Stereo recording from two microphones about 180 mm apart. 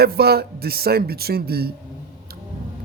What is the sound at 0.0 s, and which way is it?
Speech, 60° right (ahead or behind).